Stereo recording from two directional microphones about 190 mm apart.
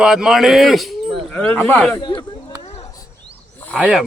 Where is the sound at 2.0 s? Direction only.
20° left (ahead or behind).